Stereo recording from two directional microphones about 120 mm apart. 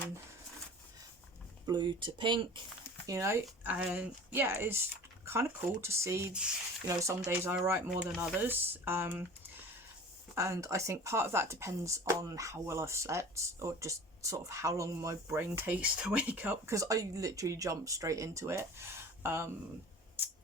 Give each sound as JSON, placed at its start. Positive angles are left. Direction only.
{"t": 1.6, "sound": "speech", "side_deg": -40}
{"t": 3.1, "sound": "speech", "side_deg": -25}
{"t": 7.9, "sound": "speech", "side_deg": -5}
{"t": 10.3, "sound": "speech", "side_deg": -25}
{"t": 16.7, "sound": "speech", "side_deg": -25}